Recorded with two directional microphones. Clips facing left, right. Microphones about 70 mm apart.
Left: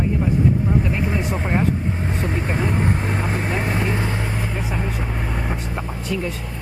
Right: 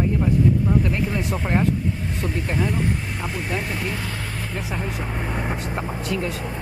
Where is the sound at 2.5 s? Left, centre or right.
Left; by 4.6 s centre.